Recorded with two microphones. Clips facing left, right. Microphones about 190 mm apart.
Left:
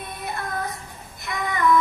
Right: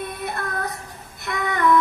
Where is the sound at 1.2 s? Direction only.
60° right (ahead or behind).